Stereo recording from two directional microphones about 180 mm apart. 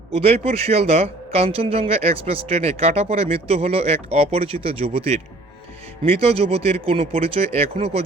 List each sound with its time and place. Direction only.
0.1 s a man's voice: 35° right (ahead or behind)